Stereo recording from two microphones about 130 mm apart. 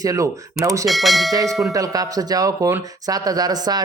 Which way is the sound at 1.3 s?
25° right (ahead or behind).